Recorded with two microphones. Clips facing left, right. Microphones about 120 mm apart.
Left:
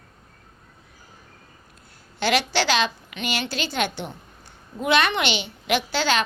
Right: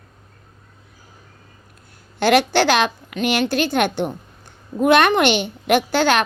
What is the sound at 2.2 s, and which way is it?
A woman's voice, 50° right (ahead or behind).